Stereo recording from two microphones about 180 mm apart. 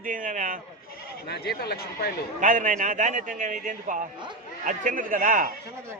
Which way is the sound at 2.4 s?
45° right (ahead or behind).